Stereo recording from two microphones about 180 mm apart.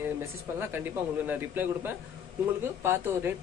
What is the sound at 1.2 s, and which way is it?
A man's voice, 10° right (ahead or behind).